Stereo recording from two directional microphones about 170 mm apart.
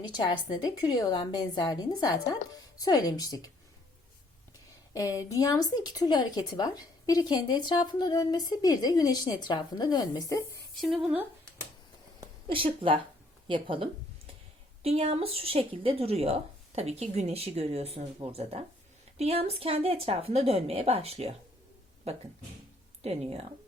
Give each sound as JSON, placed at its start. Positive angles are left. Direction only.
{"t": 0.2, "sound": "a woman's voice", "side_deg": 25}
{"t": 4.9, "sound": "a woman's voice", "side_deg": 20}
{"t": 10.8, "sound": "speech", "side_deg": 0}
{"t": 12.5, "sound": "speech", "side_deg": -30}
{"t": 23.0, "sound": "speech", "side_deg": -35}